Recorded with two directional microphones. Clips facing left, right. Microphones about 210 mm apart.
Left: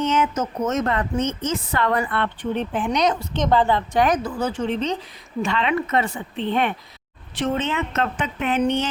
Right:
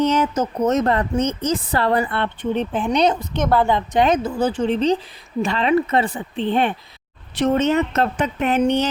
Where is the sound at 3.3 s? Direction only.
10° right (ahead or behind); by 8.8 s 40° right (ahead or behind).